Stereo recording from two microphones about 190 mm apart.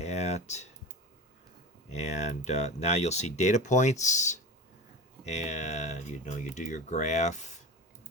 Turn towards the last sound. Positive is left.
turn(degrees=40)  # may be behind; listen again after turning